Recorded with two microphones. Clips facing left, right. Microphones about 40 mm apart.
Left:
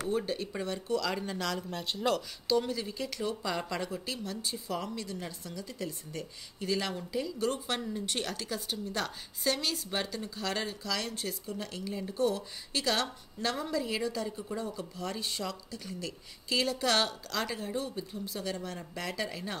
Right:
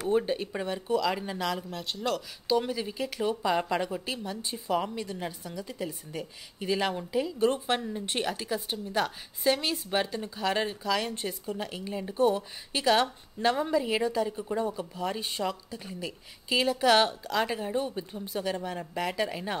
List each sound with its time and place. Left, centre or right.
0.1 s speech: right
1.8 s speech: centre
2.4 s speech: centre